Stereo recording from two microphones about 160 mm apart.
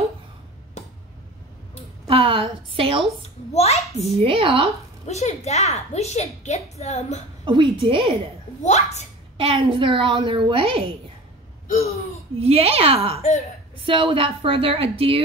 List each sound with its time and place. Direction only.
0.8 s a sound: 45° left (ahead or behind)
2.0 s a woman's voice: 35° right (ahead or behind)
3.2 s a child's voice: 40° left (ahead or behind)
4.2 s a woman's voice: 35° right (ahead or behind)
5.0 s a child's voice: 45° left (ahead or behind)
7.4 s a woman's voice: 30° right (ahead or behind)
8.6 s a child's voice: 45° left (ahead or behind)
9.4 s a woman's voice: 35° right (ahead or behind)
11.6 s a sound: 45° left (ahead or behind)
12.4 s a woman's voice: 40° right (ahead or behind)